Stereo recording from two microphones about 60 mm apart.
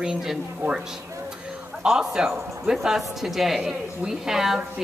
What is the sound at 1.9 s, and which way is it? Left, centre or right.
A woman's voice, centre.